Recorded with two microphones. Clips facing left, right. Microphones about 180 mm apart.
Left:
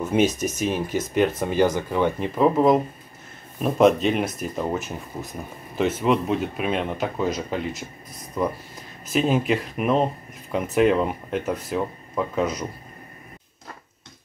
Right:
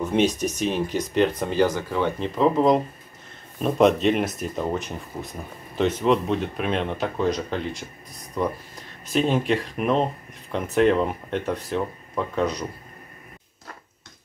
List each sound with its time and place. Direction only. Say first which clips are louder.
0.0 s speech: left 1 dB; 5° left (ahead or behind)